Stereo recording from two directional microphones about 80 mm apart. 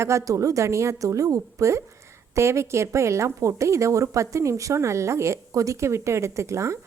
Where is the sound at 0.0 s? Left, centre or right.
Right.